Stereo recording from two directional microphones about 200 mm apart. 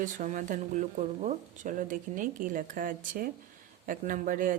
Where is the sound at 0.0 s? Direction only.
40° right (ahead or behind).